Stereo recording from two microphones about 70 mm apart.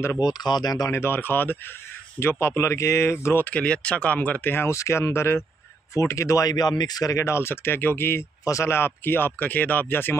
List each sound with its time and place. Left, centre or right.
0.2 s speech: left
0.8 s speech: left
3.4 s speech: centre
4.6 s speech: left
6.5 s speech: left
7.2 s speech: left
8.5 s speech: left
8.7 s speech: left